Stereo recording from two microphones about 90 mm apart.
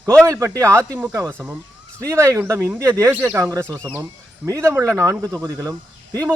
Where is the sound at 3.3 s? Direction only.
35° right (ahead or behind).